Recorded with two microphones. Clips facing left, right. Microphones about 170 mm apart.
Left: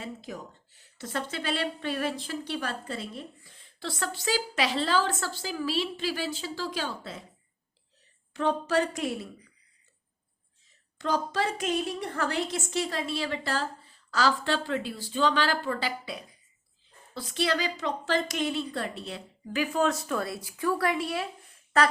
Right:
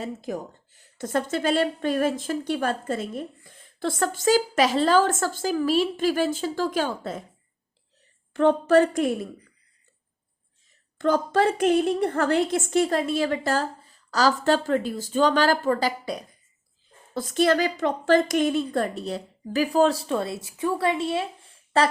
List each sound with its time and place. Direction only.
0.0 s speech: 45° right (ahead or behind)
8.3 s speech: 55° right (ahead or behind)
10.9 s a woman's voice: 55° right (ahead or behind); by 21.9 s 30° right (ahead or behind)